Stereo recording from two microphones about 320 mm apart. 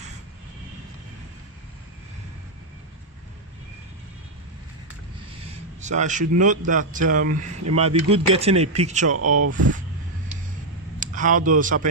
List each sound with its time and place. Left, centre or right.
5.8 s speech: right
7.3 s speech: right
7.8 s speech: centre
9.0 s speech: right
11.0 s speech: right